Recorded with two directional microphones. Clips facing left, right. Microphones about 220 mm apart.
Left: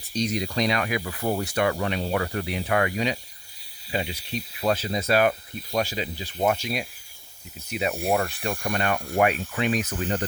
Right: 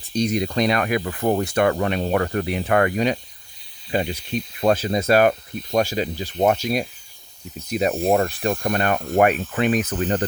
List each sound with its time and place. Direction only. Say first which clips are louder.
0.1 s speech: right 5 dB; 55° right (ahead or behind)